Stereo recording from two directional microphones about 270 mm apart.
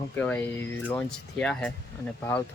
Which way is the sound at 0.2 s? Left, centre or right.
Centre.